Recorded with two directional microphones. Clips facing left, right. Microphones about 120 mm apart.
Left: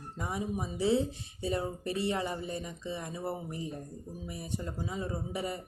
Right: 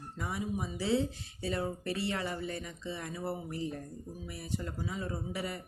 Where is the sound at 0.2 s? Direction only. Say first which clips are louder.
Left 1 dB; 25° left (ahead or behind).